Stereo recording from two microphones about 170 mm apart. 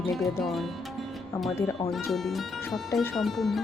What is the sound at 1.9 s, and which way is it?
Speech, centre (ahead or behind).